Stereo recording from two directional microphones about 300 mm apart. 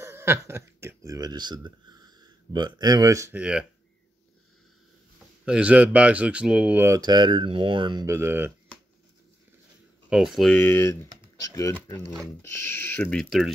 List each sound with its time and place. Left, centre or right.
0.0 s speech: centre
5.4 s speech: centre
10.0 s speech: centre